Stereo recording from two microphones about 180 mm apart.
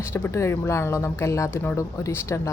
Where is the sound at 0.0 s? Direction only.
15° left (ahead or behind).